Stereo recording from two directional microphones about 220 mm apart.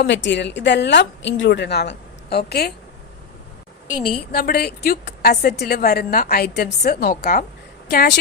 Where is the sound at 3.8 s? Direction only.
35° left (ahead or behind).